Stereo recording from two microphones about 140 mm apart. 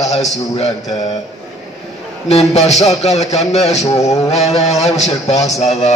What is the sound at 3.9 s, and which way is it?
Mantra, 25° left (ahead or behind).